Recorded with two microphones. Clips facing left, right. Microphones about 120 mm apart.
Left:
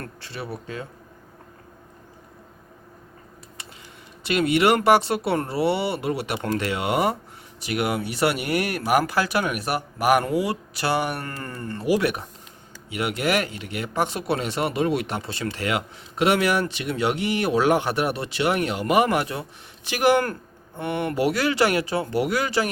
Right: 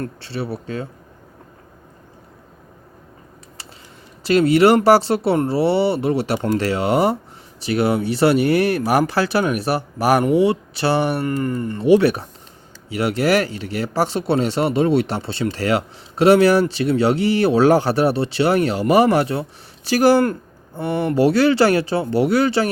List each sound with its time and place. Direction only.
0.0 s speech: 30° right (ahead or behind)
4.2 s speech: 35° right (ahead or behind)